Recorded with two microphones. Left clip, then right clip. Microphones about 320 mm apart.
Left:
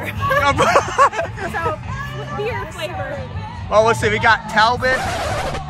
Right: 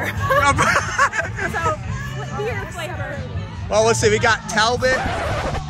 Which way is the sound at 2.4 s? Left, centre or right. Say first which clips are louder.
Left 2 dB; centre.